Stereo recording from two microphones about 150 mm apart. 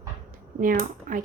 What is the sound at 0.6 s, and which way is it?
Speech, 70° right (ahead or behind).